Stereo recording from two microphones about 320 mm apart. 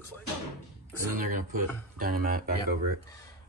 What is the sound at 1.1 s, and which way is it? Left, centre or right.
Speech, right.